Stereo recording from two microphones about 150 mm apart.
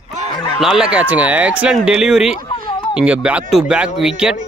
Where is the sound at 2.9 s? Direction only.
5° right (ahead or behind).